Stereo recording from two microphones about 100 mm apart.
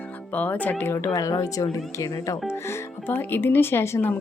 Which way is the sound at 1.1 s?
35° left (ahead or behind).